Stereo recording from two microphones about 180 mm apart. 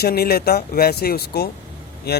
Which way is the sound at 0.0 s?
60° left (ahead or behind).